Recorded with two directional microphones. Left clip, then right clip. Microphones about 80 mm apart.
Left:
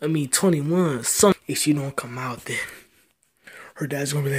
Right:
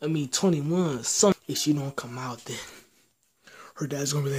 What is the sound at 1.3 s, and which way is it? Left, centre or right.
Speech, centre.